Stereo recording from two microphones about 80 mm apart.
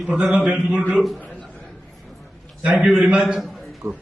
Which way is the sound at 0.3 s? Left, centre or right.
Centre.